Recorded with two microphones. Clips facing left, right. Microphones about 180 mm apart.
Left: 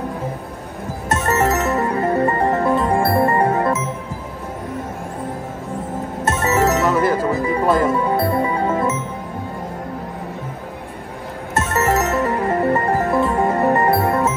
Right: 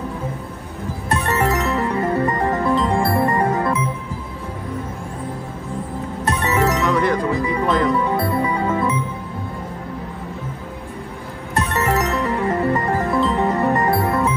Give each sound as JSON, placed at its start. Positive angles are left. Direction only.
{"t": 1.3, "sound": "music", "side_deg": 25}
{"t": 1.6, "sound": "music", "side_deg": 45}
{"t": 2.0, "sound": "music", "side_deg": 30}
{"t": 6.2, "sound": "music", "side_deg": 25}
{"t": 6.9, "sound": "music", "side_deg": 5}
{"t": 7.4, "sound": "music", "side_deg": 35}
{"t": 11.5, "sound": "music", "side_deg": 25}